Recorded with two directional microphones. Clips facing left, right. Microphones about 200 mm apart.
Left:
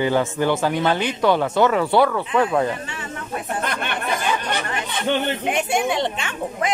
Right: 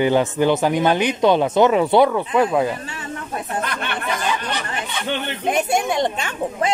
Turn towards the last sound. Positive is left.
turn(degrees=-40)  # may be behind; listen again after turning